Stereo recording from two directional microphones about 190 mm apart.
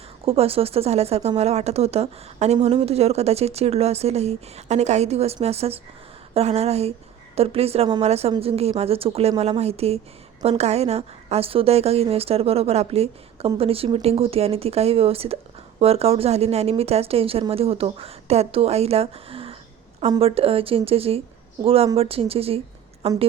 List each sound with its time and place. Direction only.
0.3 s speech: 30° right (ahead or behind)